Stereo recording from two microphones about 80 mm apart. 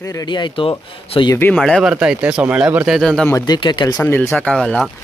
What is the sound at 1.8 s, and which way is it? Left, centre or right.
Speech, centre.